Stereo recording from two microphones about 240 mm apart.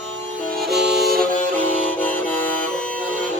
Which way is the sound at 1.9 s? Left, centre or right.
Centre.